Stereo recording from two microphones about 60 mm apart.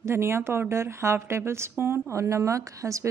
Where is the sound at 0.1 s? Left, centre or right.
Right.